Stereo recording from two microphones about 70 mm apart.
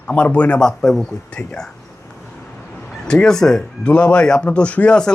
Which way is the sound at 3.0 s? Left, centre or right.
Centre.